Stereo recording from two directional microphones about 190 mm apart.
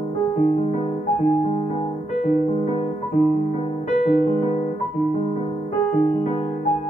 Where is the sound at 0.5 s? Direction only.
30° left (ahead or behind).